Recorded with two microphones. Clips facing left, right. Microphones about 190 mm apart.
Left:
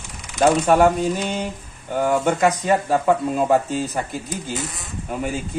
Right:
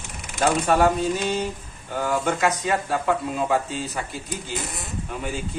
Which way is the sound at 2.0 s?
55° left (ahead or behind).